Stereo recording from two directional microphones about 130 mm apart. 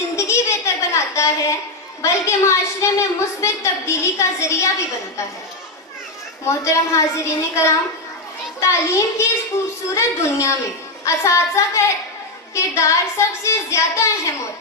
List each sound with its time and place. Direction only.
0.2 s child singing: 20° left (ahead or behind)
6.4 s child singing: 20° left (ahead or behind)